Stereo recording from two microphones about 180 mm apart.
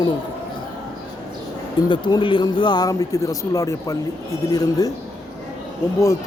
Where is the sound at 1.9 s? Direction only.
25° left (ahead or behind).